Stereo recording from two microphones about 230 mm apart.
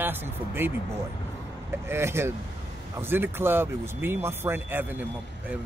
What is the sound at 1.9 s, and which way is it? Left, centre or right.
Speech, centre.